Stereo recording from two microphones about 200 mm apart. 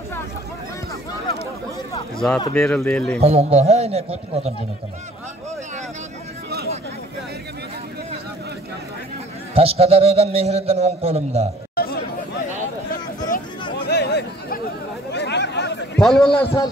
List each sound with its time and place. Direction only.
2.1 s speech: 5° left (ahead or behind)
3.2 s a man's voice: 30° right (ahead or behind)
9.6 s a man's voice: 30° right (ahead or behind)
11.7 s chatter: 50° left (ahead or behind)
13.8 s a sound: 55° left (ahead or behind)
16.0 s speech: centre (ahead or behind)